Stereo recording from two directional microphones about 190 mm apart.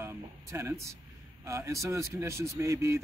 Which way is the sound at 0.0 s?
15° right (ahead or behind).